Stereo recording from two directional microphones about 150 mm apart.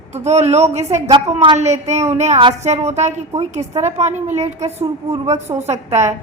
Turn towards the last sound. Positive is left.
turn(degrees=-50)  # may be behind; listen again after turning